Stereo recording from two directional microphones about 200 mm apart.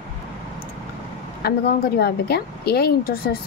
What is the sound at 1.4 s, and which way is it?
Speech, 55° left (ahead or behind).